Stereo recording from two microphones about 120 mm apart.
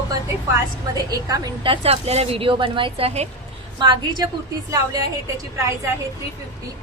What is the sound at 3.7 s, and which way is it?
Speech, 40° right (ahead or behind).